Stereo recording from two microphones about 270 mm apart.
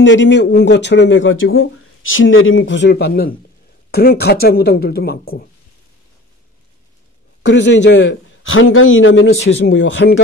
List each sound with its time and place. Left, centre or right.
0.0 s speech: left
7.4 s a man's voice: left